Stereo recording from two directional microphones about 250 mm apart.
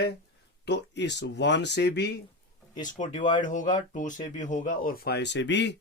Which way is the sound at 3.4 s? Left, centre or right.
Left.